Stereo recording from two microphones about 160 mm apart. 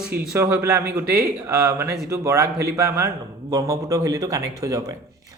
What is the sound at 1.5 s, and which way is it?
Speech, 15° right (ahead or behind).